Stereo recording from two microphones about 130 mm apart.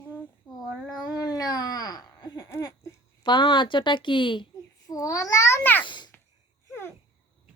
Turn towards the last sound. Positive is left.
turn(degrees=35)  # may be behind; listen again after turning